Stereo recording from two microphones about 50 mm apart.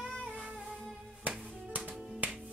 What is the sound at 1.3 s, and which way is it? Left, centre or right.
Music, right.